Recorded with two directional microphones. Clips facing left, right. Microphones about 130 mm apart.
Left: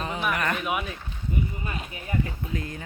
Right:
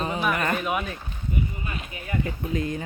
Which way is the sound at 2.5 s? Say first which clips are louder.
Right 6 dB; 20° right (ahead or behind).